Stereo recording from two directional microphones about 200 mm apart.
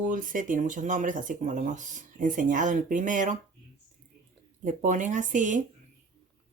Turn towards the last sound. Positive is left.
turn(degrees=-40)  # may be behind; listen again after turning